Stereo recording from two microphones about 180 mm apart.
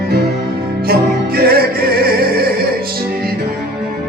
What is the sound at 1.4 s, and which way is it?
Music, 60° right (ahead or behind).